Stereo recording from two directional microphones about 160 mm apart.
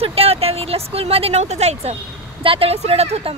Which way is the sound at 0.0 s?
40° right (ahead or behind).